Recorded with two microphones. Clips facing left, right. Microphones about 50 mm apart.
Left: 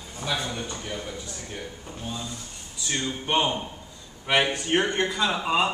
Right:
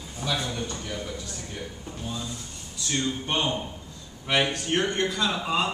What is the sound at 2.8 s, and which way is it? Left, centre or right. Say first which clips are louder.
A man's voice: even; centre.